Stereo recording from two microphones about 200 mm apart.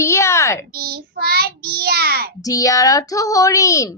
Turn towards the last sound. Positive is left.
turn(degrees=15)  # may be behind; listen again after turning